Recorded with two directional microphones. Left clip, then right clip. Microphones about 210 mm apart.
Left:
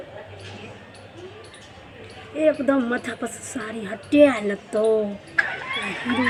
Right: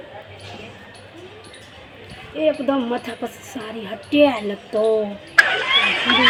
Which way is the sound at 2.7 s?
20° left (ahead or behind).